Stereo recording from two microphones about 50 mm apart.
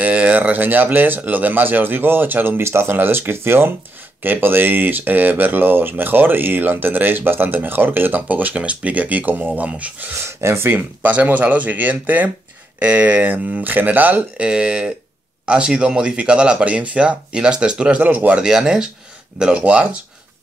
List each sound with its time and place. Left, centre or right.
0.0 s speech: right
9.5 s speech: right
10.2 s speech: right
10.7 s speech: right
14.3 s speech: centre
18.0 s speech: right
18.4 s speech: centre